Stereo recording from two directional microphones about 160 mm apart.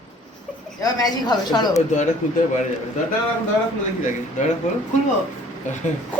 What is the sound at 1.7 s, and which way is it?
Speech, 50° left (ahead or behind).